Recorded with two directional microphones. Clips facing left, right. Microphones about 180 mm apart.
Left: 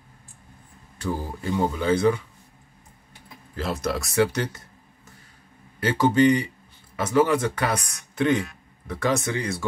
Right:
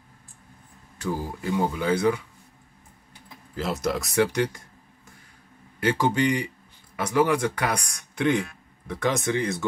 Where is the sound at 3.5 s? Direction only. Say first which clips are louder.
Even; 20° right (ahead or behind).